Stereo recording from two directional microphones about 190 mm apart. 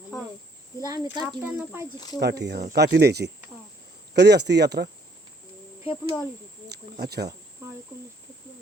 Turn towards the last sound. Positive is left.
turn(degrees=-55)  # may be behind; listen again after turning